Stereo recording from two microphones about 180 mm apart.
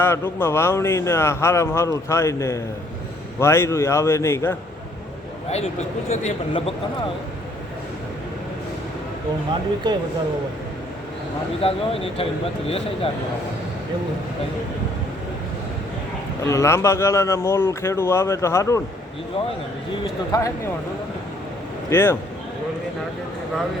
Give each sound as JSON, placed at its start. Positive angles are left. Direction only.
{"t": 0.0, "sound": "speech", "side_deg": 15}
{"t": 5.5, "sound": "speech", "side_deg": 35}
{"t": 9.8, "sound": "speech", "side_deg": -25}
{"t": 11.6, "sound": "speech", "side_deg": 30}
{"t": 16.4, "sound": "speech", "side_deg": 15}
{"t": 20.3, "sound": "speech", "side_deg": 20}
{"t": 21.8, "sound": "speech", "side_deg": 15}